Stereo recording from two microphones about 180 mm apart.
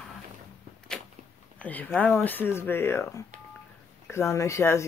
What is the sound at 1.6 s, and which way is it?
Speech, 10° left (ahead or behind).